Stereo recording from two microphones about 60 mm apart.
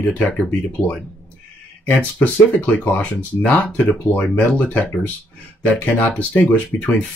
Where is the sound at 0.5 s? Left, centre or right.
Left.